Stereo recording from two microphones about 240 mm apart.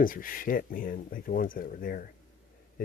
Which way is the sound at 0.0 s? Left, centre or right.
Left.